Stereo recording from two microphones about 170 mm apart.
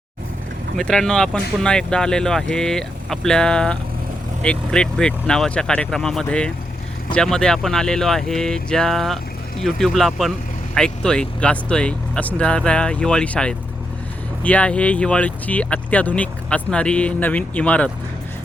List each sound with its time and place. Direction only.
0.8 s speech: 5° left (ahead or behind)